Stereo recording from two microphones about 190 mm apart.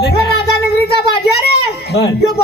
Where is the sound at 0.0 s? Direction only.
55° left (ahead or behind).